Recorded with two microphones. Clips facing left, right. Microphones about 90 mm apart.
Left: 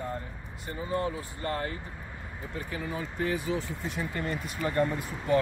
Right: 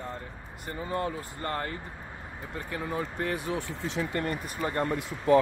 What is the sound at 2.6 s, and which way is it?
Speech, 55° right (ahead or behind).